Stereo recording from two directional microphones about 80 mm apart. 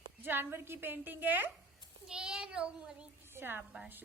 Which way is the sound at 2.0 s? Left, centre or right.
Centre.